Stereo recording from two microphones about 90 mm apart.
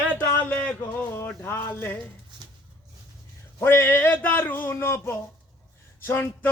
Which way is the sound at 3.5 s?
25° left (ahead or behind).